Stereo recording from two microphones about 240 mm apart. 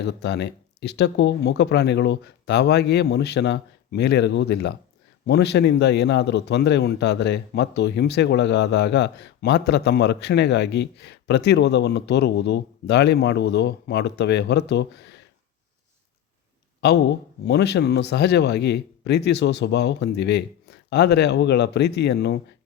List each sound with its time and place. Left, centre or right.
0.0 s a man's voice: left
17.4 s a man's voice: left